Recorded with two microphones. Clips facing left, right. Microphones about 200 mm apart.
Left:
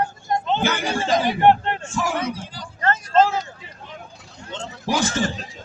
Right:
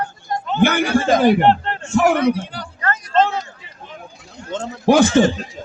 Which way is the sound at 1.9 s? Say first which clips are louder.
Right 12 dB; 65° right (ahead or behind).